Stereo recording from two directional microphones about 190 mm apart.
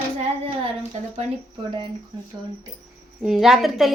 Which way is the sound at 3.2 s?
Centre (ahead or behind).